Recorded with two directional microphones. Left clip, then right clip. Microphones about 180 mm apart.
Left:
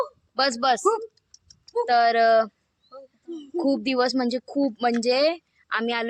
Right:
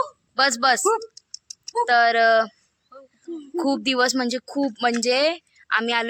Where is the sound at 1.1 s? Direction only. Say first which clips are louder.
Right 14 dB; 30° left (ahead or behind).